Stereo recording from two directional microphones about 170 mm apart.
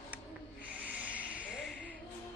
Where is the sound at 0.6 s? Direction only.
10° right (ahead or behind).